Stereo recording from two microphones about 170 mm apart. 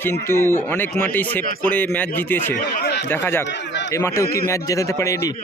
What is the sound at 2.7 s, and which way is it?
Speech, 65° left (ahead or behind).